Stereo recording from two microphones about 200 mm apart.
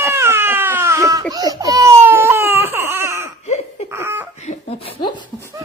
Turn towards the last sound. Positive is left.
turn(degrees=20)  # may be behind; listen again after turning